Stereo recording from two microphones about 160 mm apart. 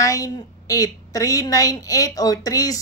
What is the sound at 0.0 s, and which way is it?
A woman's voice, 20° left (ahead or behind).